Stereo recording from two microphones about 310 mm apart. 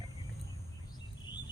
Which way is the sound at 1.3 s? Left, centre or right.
Centre.